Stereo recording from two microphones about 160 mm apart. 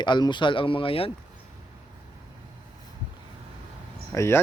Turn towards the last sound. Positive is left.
turn(degrees=20)  # may be behind; listen again after turning